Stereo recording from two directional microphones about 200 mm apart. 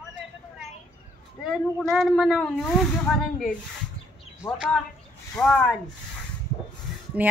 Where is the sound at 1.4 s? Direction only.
Centre (ahead or behind).